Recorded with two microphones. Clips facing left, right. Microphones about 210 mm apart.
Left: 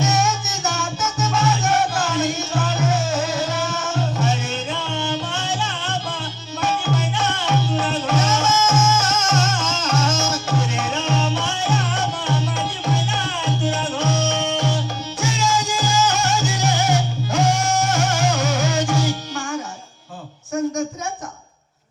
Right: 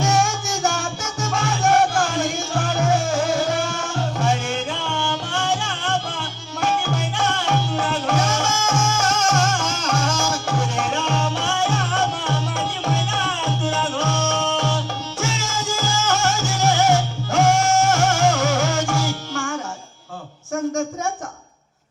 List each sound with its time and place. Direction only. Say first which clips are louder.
0.0 s music: right 1 dB; 20° left (ahead or behind)